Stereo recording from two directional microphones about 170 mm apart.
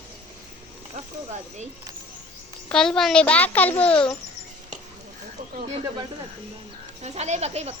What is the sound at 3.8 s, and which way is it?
Speech, 30° left (ahead or behind).